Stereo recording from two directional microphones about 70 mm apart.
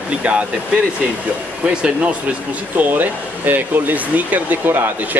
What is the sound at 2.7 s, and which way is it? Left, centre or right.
Speech, right.